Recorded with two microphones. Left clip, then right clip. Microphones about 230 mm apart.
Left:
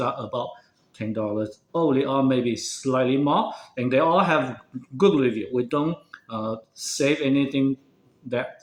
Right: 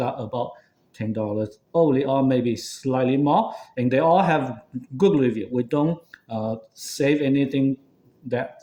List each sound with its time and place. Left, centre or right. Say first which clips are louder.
0.0 s speech: even; right